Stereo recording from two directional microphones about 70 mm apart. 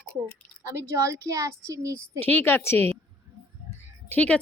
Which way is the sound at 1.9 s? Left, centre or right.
Left.